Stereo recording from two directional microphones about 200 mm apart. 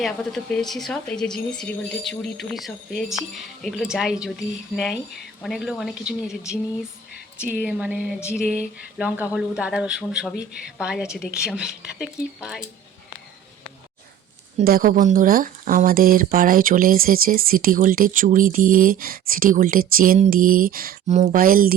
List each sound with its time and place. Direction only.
0.0 s speech: centre (ahead or behind)
7.4 s speech: 5° right (ahead or behind)
14.6 s speech: 45° right (ahead or behind)